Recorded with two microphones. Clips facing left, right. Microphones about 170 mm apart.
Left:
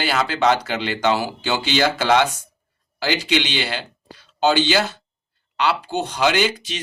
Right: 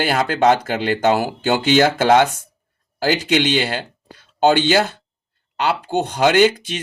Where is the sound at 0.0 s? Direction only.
50° right (ahead or behind).